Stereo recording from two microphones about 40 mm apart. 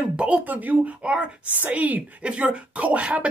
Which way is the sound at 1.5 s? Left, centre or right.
Right.